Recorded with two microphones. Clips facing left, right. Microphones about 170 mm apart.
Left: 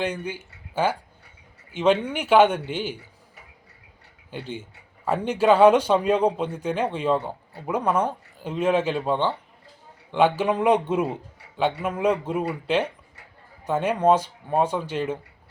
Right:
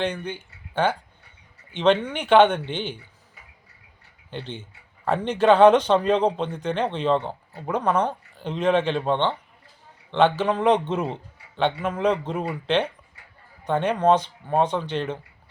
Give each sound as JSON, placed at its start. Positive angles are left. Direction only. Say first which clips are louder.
{"t": 0.0, "sound": "speech", "louder": "right 1 dB", "side_deg": 10}
{"t": 4.3, "sound": "speech", "louder": "left 1 dB", "side_deg": 10}